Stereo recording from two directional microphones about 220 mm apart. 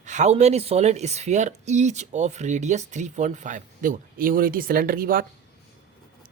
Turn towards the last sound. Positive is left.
turn(degrees=-40)  # may be behind; listen again after turning